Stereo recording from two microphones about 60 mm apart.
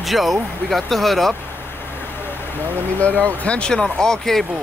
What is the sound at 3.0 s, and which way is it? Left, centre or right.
Speech, left.